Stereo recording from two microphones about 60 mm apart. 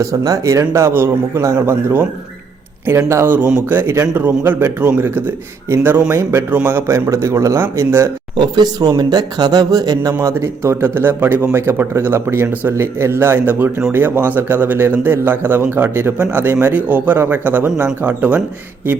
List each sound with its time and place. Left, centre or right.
0.0 s a man's voice: right
1.6 s speech: right
3.2 s speech: right
4.1 s speech: right
8.9 s speech: right
16.1 s a man's voice: right